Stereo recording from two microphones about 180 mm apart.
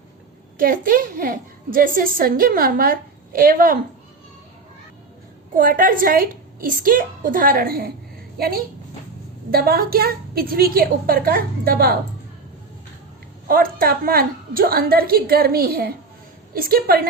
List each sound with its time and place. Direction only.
0.6 s a woman's voice: 50° right (ahead or behind)
5.5 s a woman's voice: 50° right (ahead or behind)
13.5 s a woman's voice: 55° right (ahead or behind)